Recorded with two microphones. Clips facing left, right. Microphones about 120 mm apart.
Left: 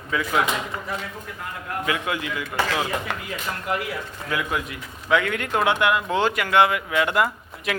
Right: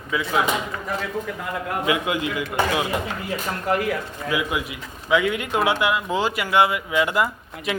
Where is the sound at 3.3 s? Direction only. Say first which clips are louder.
Right 5 dB; 40° right (ahead or behind).